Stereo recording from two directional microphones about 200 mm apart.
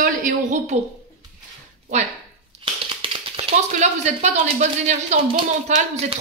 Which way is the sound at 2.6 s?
25° right (ahead or behind).